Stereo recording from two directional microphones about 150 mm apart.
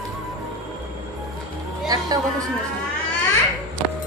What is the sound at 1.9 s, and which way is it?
Speech, 25° right (ahead or behind).